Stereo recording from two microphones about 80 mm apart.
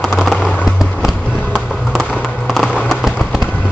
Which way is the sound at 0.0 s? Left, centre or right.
Centre.